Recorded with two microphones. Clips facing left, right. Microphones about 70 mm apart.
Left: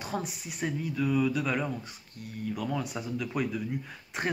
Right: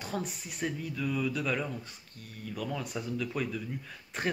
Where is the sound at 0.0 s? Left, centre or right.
Centre.